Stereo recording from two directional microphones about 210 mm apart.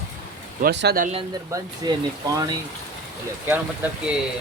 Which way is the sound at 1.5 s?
15° right (ahead or behind).